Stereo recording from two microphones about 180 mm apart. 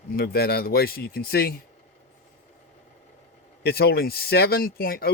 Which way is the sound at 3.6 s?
60° left (ahead or behind).